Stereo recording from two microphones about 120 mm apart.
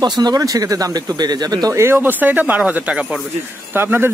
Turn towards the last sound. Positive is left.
turn(degrees=-20)  # may be behind; listen again after turning